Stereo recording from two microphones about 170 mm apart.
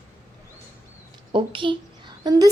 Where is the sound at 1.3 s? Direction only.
30° right (ahead or behind).